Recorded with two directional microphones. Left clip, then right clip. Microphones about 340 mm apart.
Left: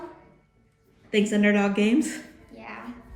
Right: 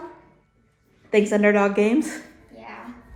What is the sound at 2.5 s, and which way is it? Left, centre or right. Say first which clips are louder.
Music: right 1 dB; centre.